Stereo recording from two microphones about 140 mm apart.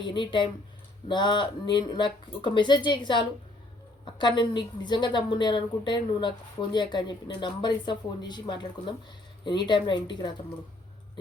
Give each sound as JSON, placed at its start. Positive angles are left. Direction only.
{"t": 0.0, "sound": "a woman's voice", "side_deg": 35}